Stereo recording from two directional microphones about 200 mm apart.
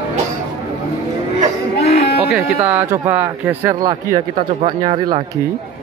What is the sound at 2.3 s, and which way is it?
Speech, 10° right (ahead or behind).